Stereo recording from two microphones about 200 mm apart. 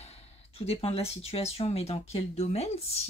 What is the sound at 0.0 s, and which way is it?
Speech, 30° left (ahead or behind).